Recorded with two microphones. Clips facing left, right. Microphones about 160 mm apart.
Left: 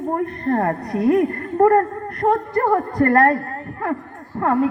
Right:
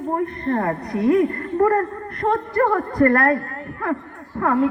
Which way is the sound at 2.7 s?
30° left (ahead or behind).